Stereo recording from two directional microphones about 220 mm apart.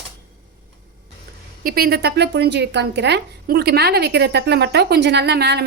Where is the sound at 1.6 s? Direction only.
45° right (ahead or behind).